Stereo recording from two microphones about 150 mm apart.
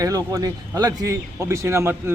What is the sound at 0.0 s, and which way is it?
Speech, 25° right (ahead or behind).